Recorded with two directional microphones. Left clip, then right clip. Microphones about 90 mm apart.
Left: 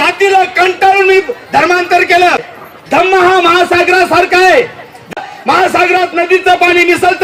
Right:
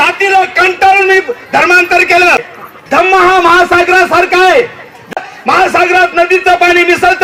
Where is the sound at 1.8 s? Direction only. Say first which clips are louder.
Right 1 dB; 45° right (ahead or behind).